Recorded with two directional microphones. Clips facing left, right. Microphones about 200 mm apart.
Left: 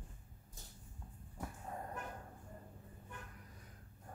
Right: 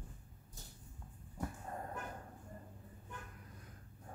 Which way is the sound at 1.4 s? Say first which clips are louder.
Right 2 dB; centre (ahead or behind).